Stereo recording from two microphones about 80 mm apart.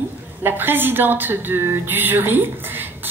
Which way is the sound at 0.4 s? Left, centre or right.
Right.